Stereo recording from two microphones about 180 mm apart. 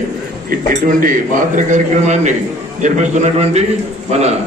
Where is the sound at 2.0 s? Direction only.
40° right (ahead or behind).